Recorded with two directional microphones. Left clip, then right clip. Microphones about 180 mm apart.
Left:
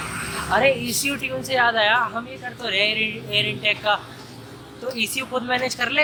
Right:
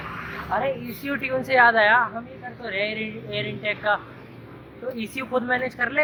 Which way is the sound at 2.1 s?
25° left (ahead or behind).